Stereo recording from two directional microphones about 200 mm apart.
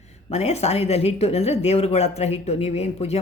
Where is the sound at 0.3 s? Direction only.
30° left (ahead or behind).